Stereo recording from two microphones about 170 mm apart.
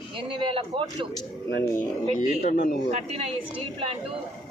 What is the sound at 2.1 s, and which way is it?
Speech, 45° left (ahead or behind).